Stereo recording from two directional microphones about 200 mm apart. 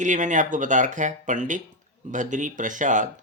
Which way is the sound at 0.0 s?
40° right (ahead or behind).